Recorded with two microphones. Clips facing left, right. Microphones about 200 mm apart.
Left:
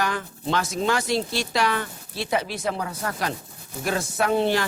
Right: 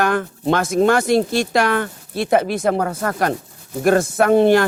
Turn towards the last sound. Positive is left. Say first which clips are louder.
# right 9 dB
turn(degrees=-55)  # may be behind; listen again after turning